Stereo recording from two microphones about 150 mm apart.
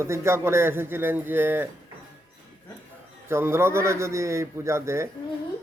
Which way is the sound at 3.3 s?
15° right (ahead or behind).